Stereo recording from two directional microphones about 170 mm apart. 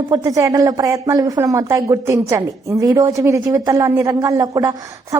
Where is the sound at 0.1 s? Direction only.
20° right (ahead or behind).